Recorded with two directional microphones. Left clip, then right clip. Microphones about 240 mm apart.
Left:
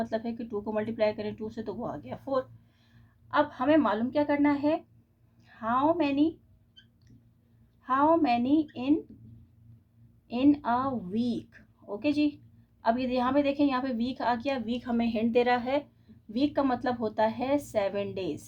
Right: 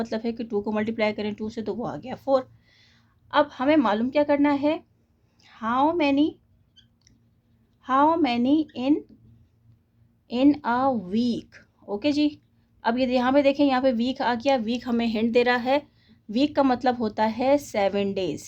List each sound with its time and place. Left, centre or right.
0.0 s a woman's voice: right
7.8 s a woman's voice: right
10.2 s a woman's voice: right